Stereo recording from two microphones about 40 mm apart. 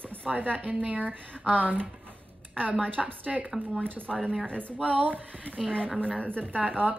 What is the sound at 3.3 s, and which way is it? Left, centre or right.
Speech, centre.